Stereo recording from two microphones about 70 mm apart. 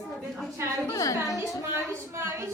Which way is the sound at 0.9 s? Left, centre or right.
Left.